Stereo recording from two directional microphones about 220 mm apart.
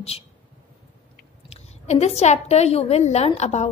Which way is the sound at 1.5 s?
30° left (ahead or behind).